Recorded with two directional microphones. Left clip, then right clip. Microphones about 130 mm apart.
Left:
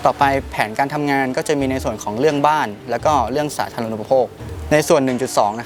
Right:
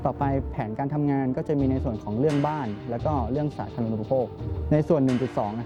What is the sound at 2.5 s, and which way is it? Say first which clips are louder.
Speech: left 12 dB; 35° left (ahead or behind).